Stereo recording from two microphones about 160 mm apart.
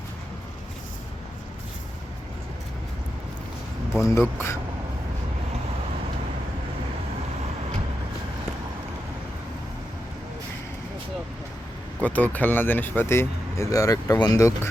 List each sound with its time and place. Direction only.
4.0 s speech: 15° left (ahead or behind)
12.0 s speech: 10° left (ahead or behind)